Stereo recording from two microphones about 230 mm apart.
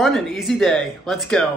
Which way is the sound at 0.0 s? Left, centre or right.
Centre.